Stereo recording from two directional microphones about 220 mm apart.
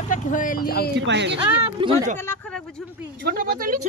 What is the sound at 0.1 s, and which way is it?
Speech, 35° left (ahead or behind).